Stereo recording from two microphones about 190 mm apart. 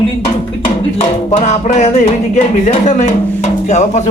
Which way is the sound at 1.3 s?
40° left (ahead or behind).